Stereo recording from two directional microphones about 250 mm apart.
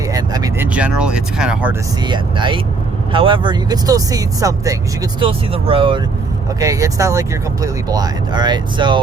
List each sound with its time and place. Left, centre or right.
0.1 s speech: centre
2.0 s speech: centre